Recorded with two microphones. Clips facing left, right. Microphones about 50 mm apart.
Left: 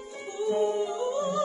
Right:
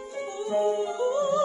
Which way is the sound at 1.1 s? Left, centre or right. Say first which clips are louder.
Right 4 dB; centre.